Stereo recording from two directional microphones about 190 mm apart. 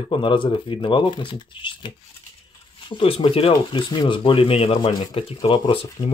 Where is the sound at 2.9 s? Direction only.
25° left (ahead or behind).